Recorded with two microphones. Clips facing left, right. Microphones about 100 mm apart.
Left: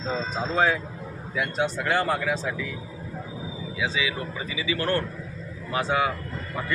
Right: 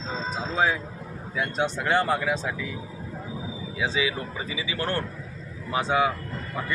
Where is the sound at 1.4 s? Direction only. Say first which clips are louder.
Even; 25° right (ahead or behind).